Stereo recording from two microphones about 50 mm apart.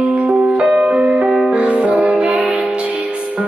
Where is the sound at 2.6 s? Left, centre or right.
Right.